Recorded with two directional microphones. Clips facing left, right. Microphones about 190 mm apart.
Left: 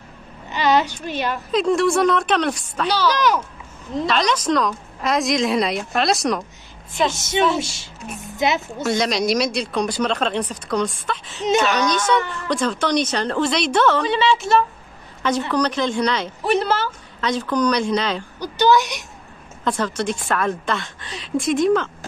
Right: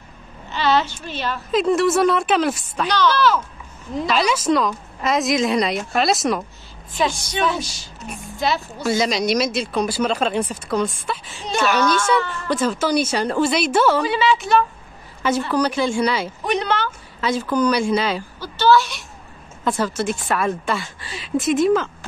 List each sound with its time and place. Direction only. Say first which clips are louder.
0.5 s a woman's voice: left 1 dB; 15° left (ahead or behind)
1.5 s a woman's voice: right 1 dB; centre (ahead or behind)
2.9 s speech: right 1 dB; 10° left (ahead or behind)
3.9 s a woman's voice: even; centre (ahead or behind)
7.1 s a woman's voice: left 3 dB; 25° left (ahead or behind)
8.8 s a woman's voice: right 1 dB; centre (ahead or behind)
12.4 s a woman's voice: right 1 dB; 5° right (ahead or behind)
16.4 s a woman's voice: left 3 dB; 5° left (ahead or behind)
17.2 s a woman's voice: right 1 dB; 5° right (ahead or behind)
18.4 s speech: even; 15° left (ahead or behind)
19.6 s a woman's voice: right 1 dB; 5° right (ahead or behind)